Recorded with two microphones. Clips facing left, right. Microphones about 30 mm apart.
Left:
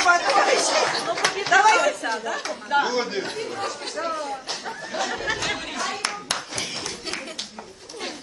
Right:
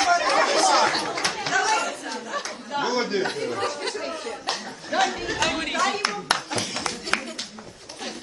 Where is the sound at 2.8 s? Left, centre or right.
Centre.